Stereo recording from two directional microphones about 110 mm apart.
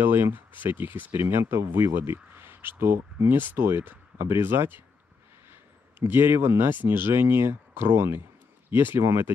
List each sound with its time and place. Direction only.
0.0 s speech: 20° right (ahead or behind)